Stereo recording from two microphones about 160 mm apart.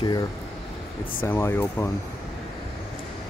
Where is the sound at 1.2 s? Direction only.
15° left (ahead or behind).